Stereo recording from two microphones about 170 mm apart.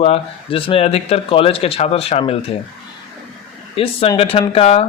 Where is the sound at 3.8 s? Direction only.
35° left (ahead or behind).